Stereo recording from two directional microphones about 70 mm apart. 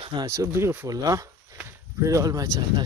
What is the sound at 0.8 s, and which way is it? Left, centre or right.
Speech, right.